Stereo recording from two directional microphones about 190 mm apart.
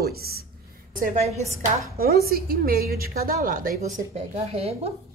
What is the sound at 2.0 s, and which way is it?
A woman's voice, 55° right (ahead or behind).